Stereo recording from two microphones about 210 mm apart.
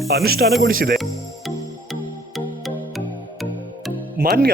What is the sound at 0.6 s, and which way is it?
Speech, 45° right (ahead or behind).